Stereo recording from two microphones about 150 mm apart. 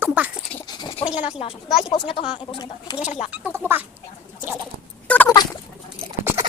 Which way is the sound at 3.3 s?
10° right (ahead or behind).